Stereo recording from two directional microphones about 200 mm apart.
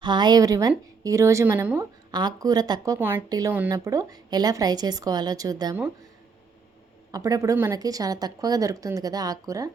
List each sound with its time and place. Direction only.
0.0 s speech: 20° right (ahead or behind)
7.1 s speech: 15° right (ahead or behind)